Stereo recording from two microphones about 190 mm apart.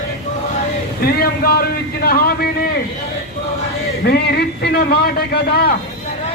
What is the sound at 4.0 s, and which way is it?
A man's voice, 60° left (ahead or behind).